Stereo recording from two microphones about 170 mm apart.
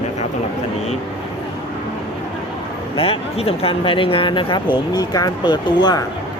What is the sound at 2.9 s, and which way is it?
Speech, 35° left (ahead or behind).